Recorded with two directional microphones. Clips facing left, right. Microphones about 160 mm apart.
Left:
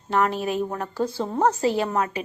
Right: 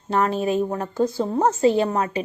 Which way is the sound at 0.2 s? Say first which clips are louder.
Right 2 dB; 25° right (ahead or behind).